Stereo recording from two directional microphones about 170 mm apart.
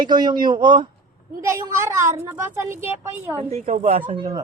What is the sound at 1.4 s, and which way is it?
A woman's voice, 15° right (ahead or behind).